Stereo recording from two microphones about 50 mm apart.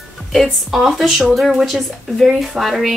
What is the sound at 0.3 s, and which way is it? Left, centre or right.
A woman's voice, centre.